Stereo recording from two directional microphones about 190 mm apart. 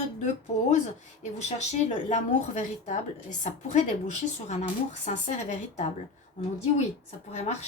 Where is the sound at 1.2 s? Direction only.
35° left (ahead or behind).